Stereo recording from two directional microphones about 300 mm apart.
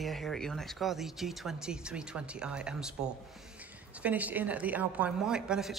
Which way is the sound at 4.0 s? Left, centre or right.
Centre.